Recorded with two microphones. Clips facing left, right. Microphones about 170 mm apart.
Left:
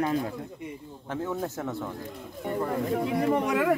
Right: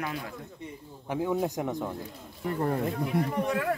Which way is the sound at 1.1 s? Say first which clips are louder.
Right 3 dB; 15° right (ahead or behind).